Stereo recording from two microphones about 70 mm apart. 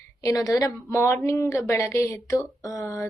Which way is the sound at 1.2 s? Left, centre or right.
Left.